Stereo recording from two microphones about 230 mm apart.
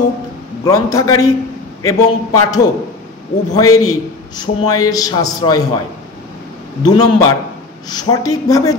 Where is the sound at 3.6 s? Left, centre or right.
Left.